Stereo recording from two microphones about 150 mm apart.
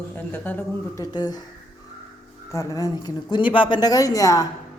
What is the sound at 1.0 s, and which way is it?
Speech, 25° left (ahead or behind).